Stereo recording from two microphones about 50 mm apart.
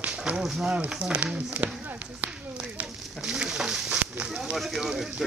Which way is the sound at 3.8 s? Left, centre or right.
Right.